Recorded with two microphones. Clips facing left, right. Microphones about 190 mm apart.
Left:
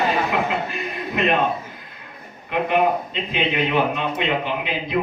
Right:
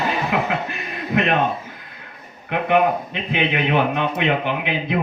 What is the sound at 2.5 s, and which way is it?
Speech, 60° right (ahead or behind).